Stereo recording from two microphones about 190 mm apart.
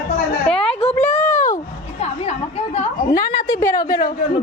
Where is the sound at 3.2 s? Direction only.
50° left (ahead or behind).